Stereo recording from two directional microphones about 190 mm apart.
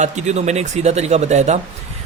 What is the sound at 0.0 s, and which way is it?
Speech, 35° right (ahead or behind).